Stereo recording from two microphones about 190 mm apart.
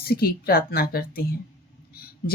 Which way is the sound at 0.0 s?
55° left (ahead or behind).